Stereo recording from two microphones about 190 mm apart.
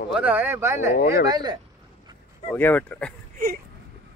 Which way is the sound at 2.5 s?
10° left (ahead or behind).